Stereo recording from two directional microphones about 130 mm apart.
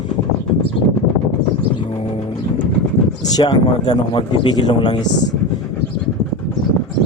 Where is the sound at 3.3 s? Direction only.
30° left (ahead or behind).